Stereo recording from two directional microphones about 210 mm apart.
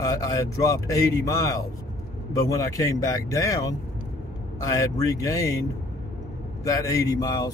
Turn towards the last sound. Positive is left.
turn(degrees=15)  # may be behind; listen again after turning